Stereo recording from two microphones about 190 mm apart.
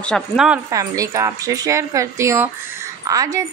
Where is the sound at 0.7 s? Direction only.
15° right (ahead or behind).